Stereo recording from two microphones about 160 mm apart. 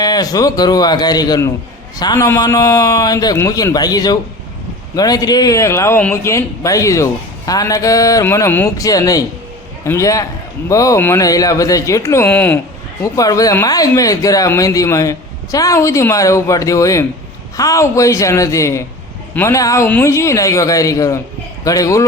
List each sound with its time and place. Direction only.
0.0 s speech: 25° left (ahead or behind)
13.0 s speech: 20° left (ahead or behind)